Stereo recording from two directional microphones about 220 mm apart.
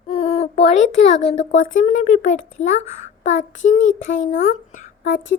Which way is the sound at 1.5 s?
60° left (ahead or behind).